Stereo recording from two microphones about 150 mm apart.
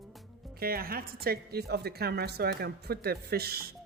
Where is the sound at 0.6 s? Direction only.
85° right.